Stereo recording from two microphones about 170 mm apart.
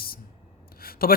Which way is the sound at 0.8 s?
60° left (ahead or behind).